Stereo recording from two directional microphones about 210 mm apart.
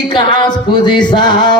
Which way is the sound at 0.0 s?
20° left (ahead or behind).